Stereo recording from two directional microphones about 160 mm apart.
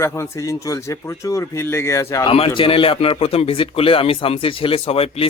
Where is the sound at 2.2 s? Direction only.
35° left (ahead or behind).